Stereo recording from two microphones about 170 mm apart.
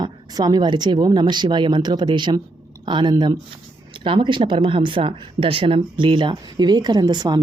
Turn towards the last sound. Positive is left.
turn(degrees=-25)  # may be behind; listen again after turning